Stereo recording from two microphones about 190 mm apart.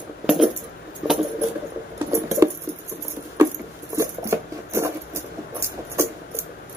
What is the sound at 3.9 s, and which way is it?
Patter, 15° right (ahead or behind).